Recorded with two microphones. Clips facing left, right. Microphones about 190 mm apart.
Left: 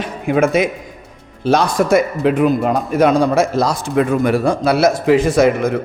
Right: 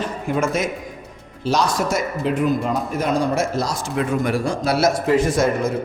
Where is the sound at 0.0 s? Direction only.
65° left (ahead or behind).